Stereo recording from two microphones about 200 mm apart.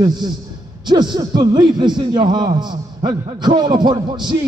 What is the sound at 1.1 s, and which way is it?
A man's voice, 20° right (ahead or behind).